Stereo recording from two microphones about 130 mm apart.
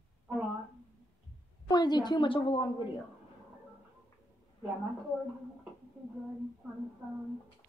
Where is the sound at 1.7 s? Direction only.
30° left (ahead or behind).